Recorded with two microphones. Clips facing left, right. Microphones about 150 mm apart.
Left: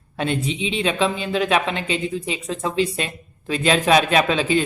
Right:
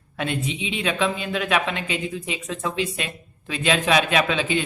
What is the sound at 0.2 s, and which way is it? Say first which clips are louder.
Speech: left 3 dB; 35° left (ahead or behind).